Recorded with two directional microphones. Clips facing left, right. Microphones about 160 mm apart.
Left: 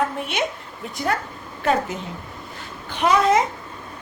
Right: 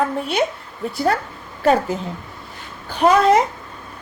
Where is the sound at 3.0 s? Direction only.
35° right (ahead or behind).